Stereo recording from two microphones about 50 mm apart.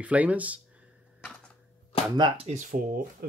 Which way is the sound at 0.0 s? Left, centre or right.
Right.